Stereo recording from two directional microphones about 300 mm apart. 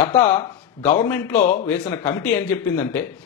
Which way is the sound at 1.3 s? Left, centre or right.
Left.